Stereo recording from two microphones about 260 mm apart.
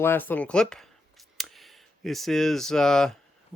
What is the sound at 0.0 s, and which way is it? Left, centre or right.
Speech, centre.